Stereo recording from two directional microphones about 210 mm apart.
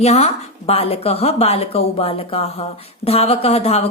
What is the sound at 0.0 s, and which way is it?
A woman's voice, 30° left (ahead or behind).